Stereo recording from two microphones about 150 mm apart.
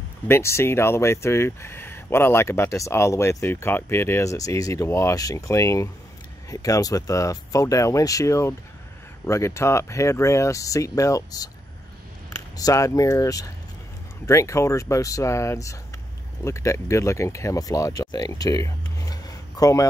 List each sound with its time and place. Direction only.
0.3 s speech: 20° left (ahead or behind)
12.5 s speech: 25° left (ahead or behind)